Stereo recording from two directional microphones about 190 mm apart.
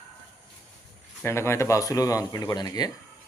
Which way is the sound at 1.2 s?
15° left (ahead or behind).